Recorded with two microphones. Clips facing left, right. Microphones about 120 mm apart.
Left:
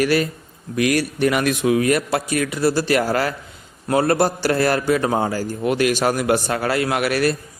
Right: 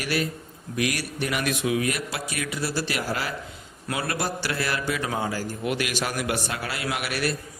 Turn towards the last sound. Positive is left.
turn(degrees=50)  # may be behind; listen again after turning